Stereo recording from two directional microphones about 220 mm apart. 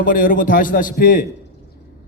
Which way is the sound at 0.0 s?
40° left (ahead or behind).